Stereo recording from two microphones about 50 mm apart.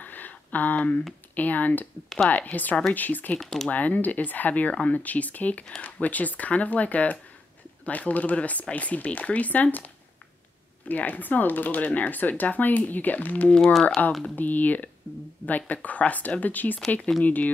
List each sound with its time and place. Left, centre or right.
0.0 s a sound: left
1.3 s speech: left
3.3 s speech: centre
3.7 s speech: left
10.9 s speech: left